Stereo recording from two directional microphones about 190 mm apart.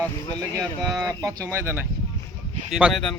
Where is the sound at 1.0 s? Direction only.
20° right (ahead or behind).